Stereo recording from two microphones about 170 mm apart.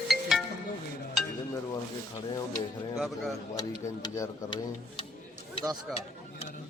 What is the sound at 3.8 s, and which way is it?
Tick-tock, 20° left (ahead or behind).